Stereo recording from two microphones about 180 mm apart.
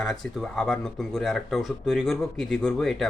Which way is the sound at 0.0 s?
Centre (ahead or behind).